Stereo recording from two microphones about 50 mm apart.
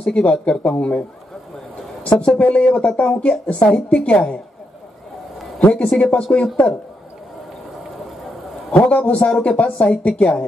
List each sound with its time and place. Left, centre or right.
0.0 s a woman's voice: left
2.1 s a woman's voice: left
5.6 s a woman's voice: left
8.7 s a man's voice: left
9.3 s a woman's voice: centre